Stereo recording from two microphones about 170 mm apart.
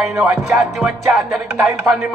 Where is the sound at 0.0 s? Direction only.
Centre (ahead or behind).